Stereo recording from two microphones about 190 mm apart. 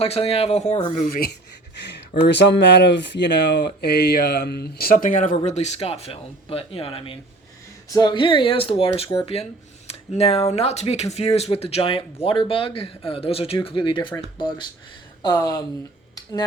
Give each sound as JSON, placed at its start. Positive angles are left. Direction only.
{"t": 0.0, "sound": "speech", "side_deg": 30}
{"t": 1.0, "sound": "speech", "side_deg": 55}